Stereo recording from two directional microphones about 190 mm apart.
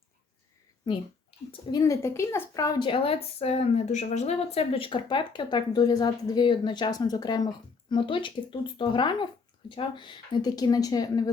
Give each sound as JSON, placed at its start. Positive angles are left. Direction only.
{"t": 1.7, "sound": "a woman's voice", "side_deg": 15}